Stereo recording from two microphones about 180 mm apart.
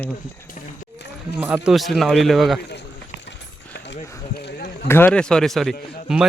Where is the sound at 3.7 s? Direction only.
75° left (ahead or behind).